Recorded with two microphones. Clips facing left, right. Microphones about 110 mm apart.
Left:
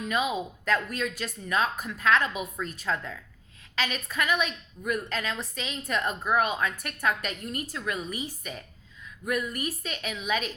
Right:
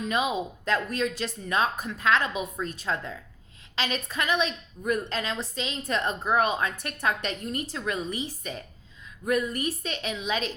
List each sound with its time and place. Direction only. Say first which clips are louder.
0.0 s a woman's voice: right 1 dB; 20° right (ahead or behind)